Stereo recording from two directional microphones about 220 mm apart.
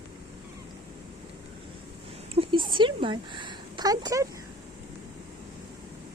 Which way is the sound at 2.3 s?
20° right (ahead or behind).